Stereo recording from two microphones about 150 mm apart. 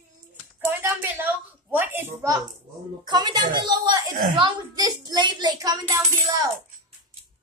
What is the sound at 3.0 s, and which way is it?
A woman's voice, 30° right (ahead or behind).